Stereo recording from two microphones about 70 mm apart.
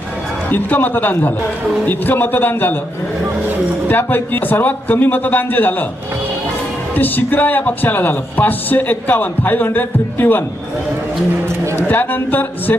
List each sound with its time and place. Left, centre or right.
0.5 s speech: left
3.8 s speech: left
6.9 s speech: left
11.9 s speech: left